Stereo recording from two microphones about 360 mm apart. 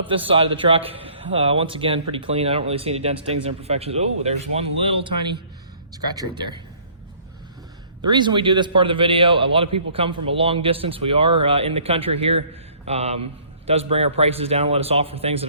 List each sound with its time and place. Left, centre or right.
0.1 s a man's voice: centre
8.0 s a man's voice: centre